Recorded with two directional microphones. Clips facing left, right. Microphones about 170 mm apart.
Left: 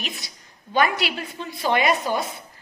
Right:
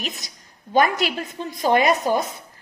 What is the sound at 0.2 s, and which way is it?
A woman's voice, 45° right (ahead or behind).